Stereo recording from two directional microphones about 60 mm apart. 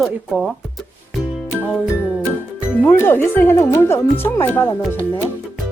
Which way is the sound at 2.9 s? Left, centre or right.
Left.